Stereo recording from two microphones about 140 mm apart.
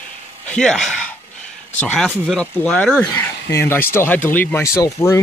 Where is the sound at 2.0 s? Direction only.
Centre (ahead or behind).